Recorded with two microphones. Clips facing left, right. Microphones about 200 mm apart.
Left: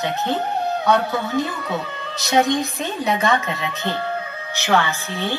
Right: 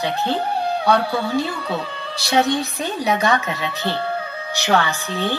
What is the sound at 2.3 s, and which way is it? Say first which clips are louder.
Speech: left 1 dB; 15° left (ahead or behind).